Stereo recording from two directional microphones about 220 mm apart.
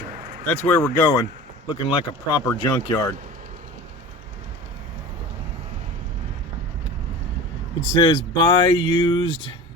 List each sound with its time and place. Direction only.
0.4 s speech: 5° left (ahead or behind)
7.9 s speech: 20° left (ahead or behind)